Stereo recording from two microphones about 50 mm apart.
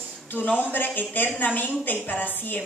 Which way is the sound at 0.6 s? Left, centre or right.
Left.